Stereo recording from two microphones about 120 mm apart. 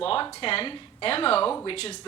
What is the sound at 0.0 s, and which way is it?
A woman's voice, 50° left (ahead or behind).